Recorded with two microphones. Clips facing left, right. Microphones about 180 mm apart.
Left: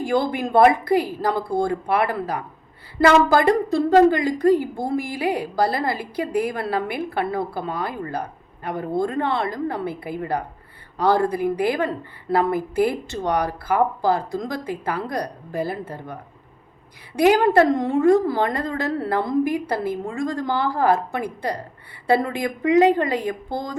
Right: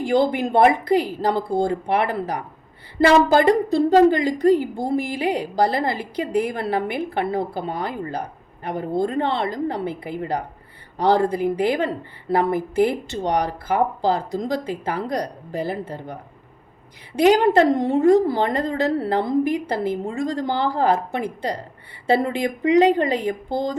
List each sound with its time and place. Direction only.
0.0 s a woman's voice: 20° right (ahead or behind)
17.2 s a woman's voice: 25° right (ahead or behind)